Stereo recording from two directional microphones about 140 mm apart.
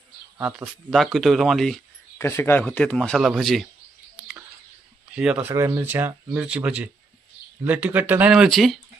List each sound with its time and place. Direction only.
0.6 s speech: centre (ahead or behind)
2.1 s speech: 20° left (ahead or behind); by 3.7 s centre (ahead or behind)
5.1 s speech: 5° right (ahead or behind)